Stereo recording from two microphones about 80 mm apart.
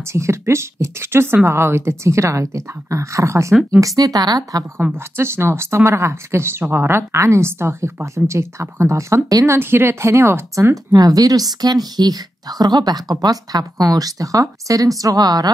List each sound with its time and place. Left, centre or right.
0.0 s speech: right
3.8 s speech: right
4.9 s speech: right
9.6 s speech: right
10.7 s a woman's voice: right